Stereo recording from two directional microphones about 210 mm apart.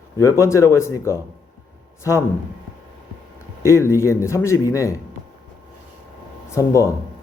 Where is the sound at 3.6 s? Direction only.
15° left (ahead or behind).